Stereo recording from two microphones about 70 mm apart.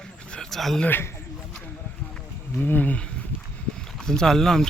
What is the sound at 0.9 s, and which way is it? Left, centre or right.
Speech, left.